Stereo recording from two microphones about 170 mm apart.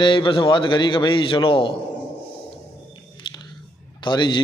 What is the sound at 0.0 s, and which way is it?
A man's voice, 30° left (ahead or behind).